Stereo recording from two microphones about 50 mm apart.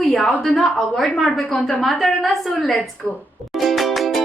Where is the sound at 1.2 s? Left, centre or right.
Centre.